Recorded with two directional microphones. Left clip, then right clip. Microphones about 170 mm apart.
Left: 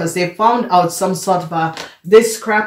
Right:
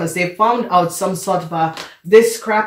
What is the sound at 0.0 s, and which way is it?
Speech, 25° left (ahead or behind).